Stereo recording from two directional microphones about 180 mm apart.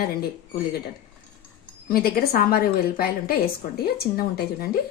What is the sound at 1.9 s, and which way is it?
A woman's voice, 55° left (ahead or behind).